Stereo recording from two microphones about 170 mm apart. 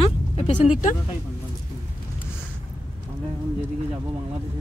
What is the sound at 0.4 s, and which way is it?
Speech, 45° left (ahead or behind).